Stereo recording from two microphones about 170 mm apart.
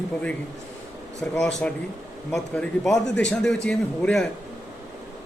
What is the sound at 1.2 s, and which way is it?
A man's voice, 5° left (ahead or behind).